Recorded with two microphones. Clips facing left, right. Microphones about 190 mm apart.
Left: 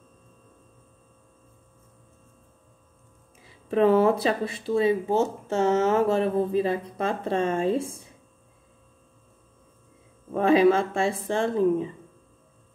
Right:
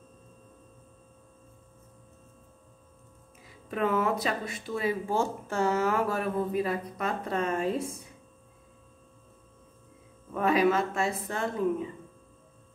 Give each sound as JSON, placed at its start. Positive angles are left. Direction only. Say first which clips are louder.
{"t": 3.4, "sound": "speech", "louder": "left 9 dB", "side_deg": 30}
{"t": 10.3, "sound": "speech", "louder": "left 6 dB", "side_deg": 30}